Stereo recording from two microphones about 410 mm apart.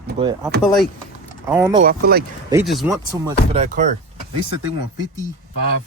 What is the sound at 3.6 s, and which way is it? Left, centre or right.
Speech, centre.